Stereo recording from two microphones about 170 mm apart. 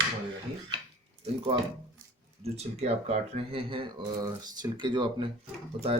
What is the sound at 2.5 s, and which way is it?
Speech, 40° right (ahead or behind).